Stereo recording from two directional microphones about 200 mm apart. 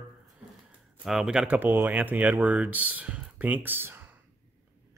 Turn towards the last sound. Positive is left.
turn(degrees=-10)  # may be behind; listen again after turning